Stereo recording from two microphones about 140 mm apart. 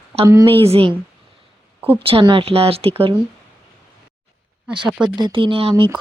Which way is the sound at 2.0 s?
40° right (ahead or behind).